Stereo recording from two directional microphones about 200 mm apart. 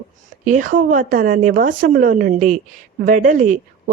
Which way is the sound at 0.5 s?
40° right (ahead or behind).